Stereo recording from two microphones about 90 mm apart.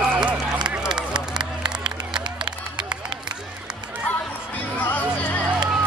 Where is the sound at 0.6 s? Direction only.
10° right (ahead or behind).